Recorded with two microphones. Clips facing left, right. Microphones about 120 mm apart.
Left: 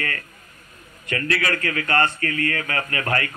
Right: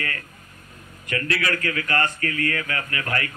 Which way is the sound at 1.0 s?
35° left (ahead or behind).